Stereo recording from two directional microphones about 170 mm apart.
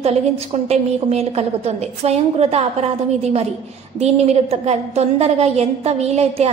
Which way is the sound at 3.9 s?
40° right (ahead or behind).